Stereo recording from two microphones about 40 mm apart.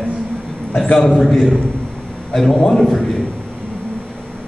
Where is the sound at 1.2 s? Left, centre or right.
Centre.